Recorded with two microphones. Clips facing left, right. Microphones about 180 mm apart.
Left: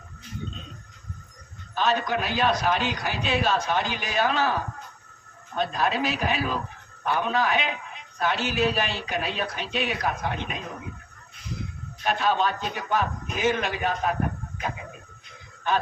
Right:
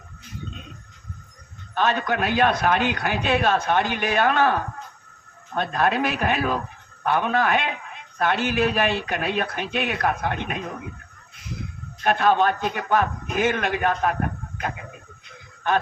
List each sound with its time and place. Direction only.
1.7 s a man's voice: 55° right (ahead or behind)
12.0 s a man's voice: 55° right (ahead or behind)